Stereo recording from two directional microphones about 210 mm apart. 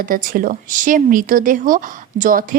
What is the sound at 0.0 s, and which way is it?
Speech, 40° right (ahead or behind).